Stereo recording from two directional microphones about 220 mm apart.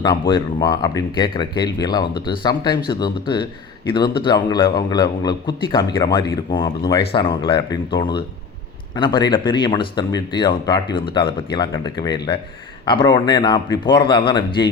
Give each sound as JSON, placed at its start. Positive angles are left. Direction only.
{"t": 0.0, "sound": "speech", "side_deg": 20}